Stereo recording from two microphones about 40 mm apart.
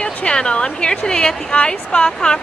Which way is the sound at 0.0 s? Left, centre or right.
Left.